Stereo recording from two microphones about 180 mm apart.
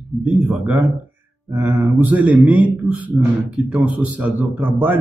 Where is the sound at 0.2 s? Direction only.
5° right (ahead or behind).